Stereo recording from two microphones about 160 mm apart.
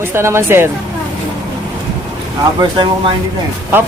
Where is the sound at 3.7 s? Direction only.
15° right (ahead or behind).